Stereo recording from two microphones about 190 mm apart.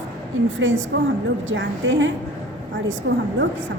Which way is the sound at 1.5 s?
90° right.